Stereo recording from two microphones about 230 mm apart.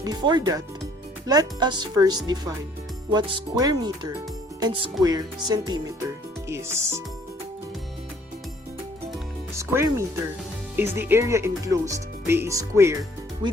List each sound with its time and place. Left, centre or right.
0.0 s speech: centre
9.6 s speech: centre